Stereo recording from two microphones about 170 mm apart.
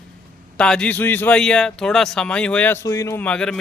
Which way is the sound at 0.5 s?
5° left (ahead or behind).